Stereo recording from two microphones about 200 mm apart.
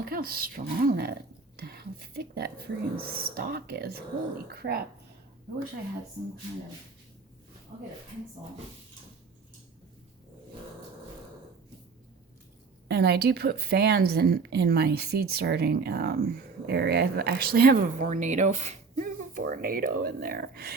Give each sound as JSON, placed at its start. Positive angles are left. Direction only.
{"t": 0.0, "sound": "speech", "side_deg": -50}
{"t": 12.9, "sound": "speech", "side_deg": -55}